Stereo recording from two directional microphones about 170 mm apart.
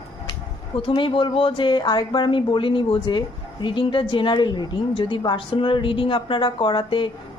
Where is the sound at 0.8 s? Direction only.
30° left (ahead or behind).